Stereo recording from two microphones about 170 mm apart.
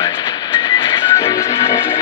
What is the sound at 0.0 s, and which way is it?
Music, 25° left (ahead or behind).